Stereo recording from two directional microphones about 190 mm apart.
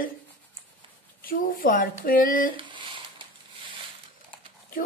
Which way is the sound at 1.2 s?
50° left (ahead or behind).